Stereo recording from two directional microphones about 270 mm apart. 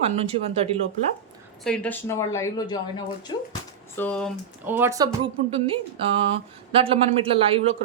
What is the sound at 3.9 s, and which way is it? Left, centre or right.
Speech, centre.